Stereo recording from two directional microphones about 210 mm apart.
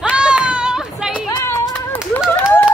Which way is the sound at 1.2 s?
10° left (ahead or behind).